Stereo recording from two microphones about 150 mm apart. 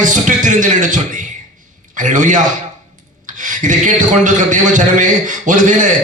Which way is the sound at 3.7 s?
60° right (ahead or behind).